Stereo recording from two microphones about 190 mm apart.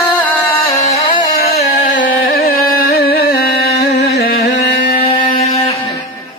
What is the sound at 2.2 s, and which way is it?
Music, 50° left (ahead or behind).